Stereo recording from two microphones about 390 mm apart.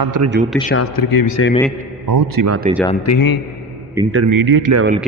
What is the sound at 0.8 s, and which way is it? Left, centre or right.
Speech, left.